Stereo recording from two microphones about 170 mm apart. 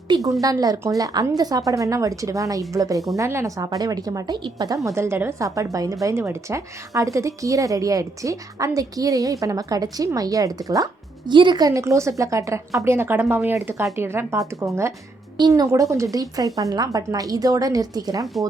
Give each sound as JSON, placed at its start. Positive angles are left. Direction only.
{"t": 0.1, "sound": "a woman's voice", "side_deg": -20}